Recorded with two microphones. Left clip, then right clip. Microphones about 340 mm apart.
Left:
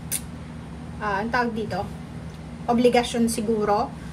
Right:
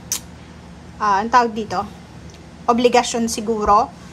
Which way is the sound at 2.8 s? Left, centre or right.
Centre.